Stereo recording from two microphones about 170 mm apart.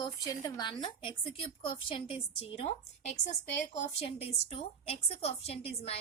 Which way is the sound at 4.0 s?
35° left (ahead or behind).